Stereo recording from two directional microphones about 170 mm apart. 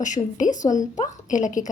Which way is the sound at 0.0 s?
45° left (ahead or behind).